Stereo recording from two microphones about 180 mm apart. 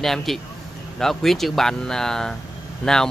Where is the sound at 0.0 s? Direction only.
Centre (ahead or behind).